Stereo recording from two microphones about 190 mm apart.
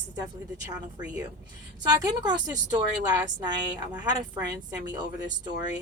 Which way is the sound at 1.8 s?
20° right (ahead or behind).